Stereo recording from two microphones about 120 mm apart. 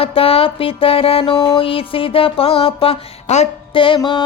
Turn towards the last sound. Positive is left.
turn(degrees=35)  # may be behind; listen again after turning